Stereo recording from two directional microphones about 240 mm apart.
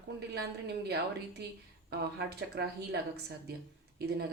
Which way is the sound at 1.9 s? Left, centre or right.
Right.